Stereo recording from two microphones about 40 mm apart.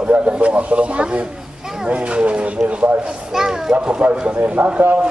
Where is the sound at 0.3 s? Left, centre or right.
Right.